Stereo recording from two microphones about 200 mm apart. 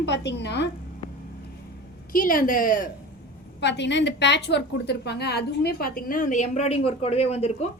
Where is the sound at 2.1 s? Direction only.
45° left (ahead or behind).